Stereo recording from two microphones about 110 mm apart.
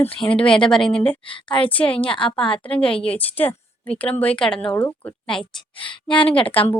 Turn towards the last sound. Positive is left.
turn(degrees=15)  # may be behind; listen again after turning